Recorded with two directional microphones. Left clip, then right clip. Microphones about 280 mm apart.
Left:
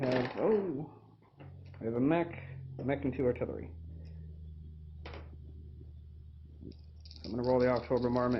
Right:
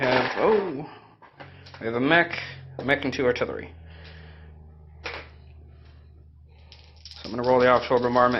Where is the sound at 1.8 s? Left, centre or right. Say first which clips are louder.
Right 11 dB; centre.